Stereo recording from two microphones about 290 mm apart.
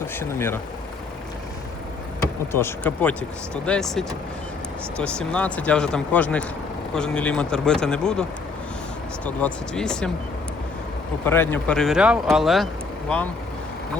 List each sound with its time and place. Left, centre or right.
0.2 s speech: centre
2.5 s speech: centre
11.3 s speech: centre